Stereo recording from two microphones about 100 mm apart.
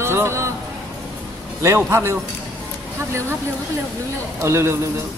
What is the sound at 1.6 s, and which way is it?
Speech, 30° right (ahead or behind).